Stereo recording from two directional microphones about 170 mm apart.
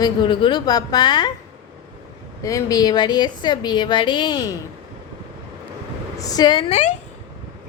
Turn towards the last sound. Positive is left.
turn(degrees=45)  # may be behind; listen again after turning